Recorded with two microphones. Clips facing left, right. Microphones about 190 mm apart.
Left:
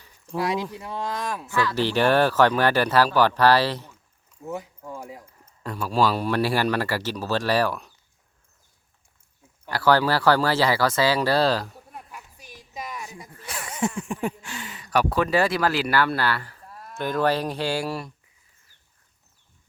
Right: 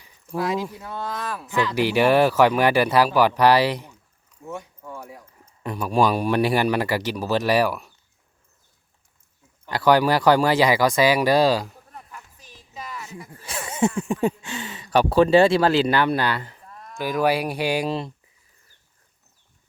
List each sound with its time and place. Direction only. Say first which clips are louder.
0.7 s speech: left 1 dB; 10° left (ahead or behind)
1.5 s speech: right 3 dB; 15° right (ahead or behind)
5.6 s speech: right 2 dB; 15° right (ahead or behind)
9.6 s speech: right 2 dB; 20° right (ahead or behind)
11.9 s a sound: left 1 dB; 10° left (ahead or behind)
13.4 s speech: right 5 dB; 25° right (ahead or behind)
16.6 s a sound: even; 5° left (ahead or behind)
17.0 s speech: right 2 dB; 10° right (ahead or behind)